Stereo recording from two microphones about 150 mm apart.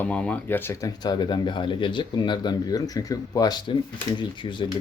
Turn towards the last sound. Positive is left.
turn(degrees=30)  # may be behind; listen again after turning